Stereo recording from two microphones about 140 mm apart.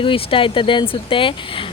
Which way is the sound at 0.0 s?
40° left (ahead or behind).